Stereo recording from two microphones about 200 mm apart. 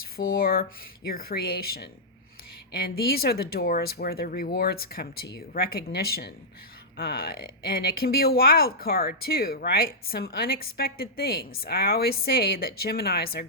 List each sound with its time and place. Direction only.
0.3 s speech: 50° left (ahead or behind)